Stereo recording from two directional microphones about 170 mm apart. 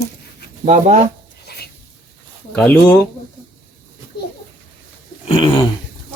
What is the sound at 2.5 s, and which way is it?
Speech, 10° left (ahead or behind).